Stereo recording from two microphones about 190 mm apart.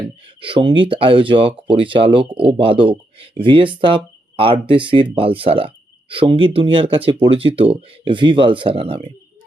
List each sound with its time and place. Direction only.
0.4 s speech: 25° right (ahead or behind)